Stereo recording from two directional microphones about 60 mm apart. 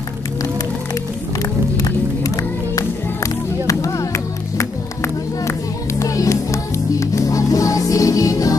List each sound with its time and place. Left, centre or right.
1.8 s music: left
3.6 s music: left
4.6 s music: left